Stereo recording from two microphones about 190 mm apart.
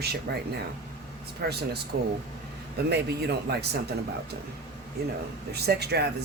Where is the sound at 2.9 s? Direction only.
60° right (ahead or behind).